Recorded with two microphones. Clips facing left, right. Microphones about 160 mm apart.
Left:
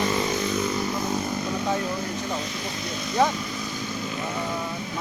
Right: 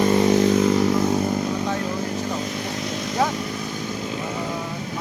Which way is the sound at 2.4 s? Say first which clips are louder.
Right 4 dB; 60° right (ahead or behind).